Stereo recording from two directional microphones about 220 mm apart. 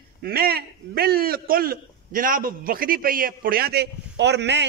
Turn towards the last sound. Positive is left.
turn(degrees=-50)  # may be behind; listen again after turning